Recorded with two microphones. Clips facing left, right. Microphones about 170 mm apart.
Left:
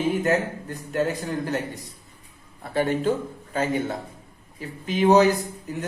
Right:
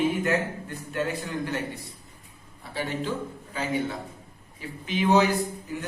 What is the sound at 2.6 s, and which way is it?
A man's voice, 50° left (ahead or behind).